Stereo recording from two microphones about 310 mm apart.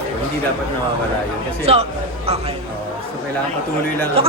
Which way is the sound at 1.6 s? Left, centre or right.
Centre.